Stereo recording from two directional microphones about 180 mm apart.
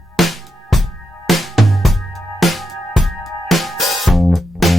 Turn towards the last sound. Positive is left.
turn(degrees=0)  # may be behind; listen again after turning